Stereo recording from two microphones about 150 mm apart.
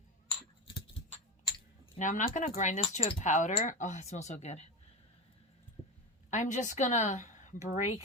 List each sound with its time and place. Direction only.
2.0 s speech: 55° left (ahead or behind)
2.9 s speech: 40° left (ahead or behind)
3.2 s speech: 55° left (ahead or behind)
6.3 s speech: 55° left (ahead or behind)